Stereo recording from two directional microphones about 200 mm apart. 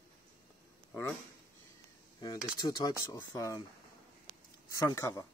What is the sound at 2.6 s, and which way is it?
Speech, 20° left (ahead or behind).